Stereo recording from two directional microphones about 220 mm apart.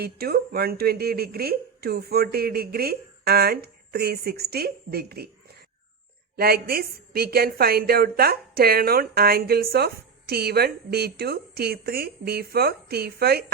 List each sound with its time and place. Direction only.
0.0 s a woman's voice: 45° right (ahead or behind)
6.3 s a woman's voice: 45° right (ahead or behind)